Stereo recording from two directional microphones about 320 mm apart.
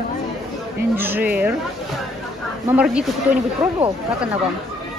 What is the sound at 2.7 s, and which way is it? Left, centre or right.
Speech, centre.